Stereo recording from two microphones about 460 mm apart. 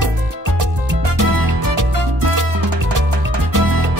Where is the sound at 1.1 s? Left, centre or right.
Right.